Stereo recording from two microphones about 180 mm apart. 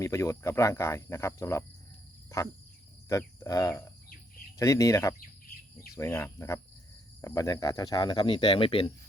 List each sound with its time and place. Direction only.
0.0 s speech: 15° left (ahead or behind)
3.1 s speech: 15° left (ahead or behind)